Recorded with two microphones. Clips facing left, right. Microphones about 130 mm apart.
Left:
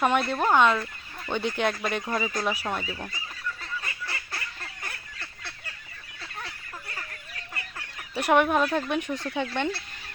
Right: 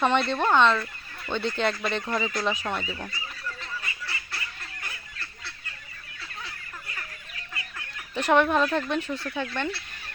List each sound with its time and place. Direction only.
0.0 s speech: 10° left (ahead or behind)
4.0 s fowl: 45° left (ahead or behind)
8.1 s speech: 10° left (ahead or behind)